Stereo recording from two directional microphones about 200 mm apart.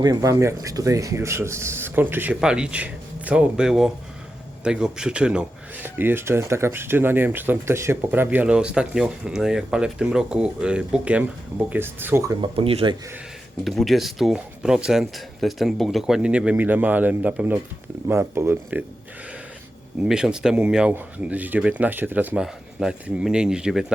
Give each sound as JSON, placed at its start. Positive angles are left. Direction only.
{"t": 0.0, "sound": "speech", "side_deg": -15}
{"t": 12.5, "sound": "speech", "side_deg": -30}
{"t": 13.7, "sound": "speech", "side_deg": 0}
{"t": 20.0, "sound": "speech", "side_deg": 0}